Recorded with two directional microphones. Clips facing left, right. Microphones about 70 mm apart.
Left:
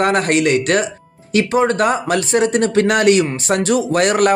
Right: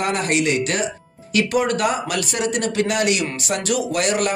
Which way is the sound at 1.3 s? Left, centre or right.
Left.